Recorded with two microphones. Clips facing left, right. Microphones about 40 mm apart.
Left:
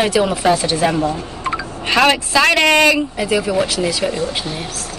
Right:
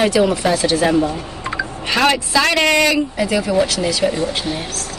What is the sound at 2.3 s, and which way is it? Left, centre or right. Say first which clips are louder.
Speech: left 2 dB; left.